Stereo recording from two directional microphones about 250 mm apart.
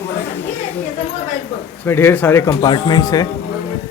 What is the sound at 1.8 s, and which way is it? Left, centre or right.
Speech, centre.